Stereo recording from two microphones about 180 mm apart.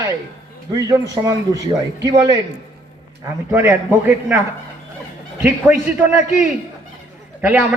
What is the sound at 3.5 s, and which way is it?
Speech, 15° right (ahead or behind).